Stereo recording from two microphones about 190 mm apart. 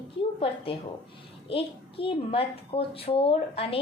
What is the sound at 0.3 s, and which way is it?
A woman's voice, 30° left (ahead or behind).